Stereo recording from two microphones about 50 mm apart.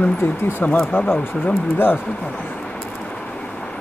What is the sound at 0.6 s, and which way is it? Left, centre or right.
Speech, left.